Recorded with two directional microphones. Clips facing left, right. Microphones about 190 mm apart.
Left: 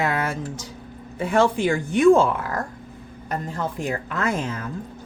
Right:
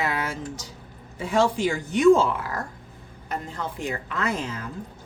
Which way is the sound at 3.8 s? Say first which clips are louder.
Left 1 dB; 45° left (ahead or behind).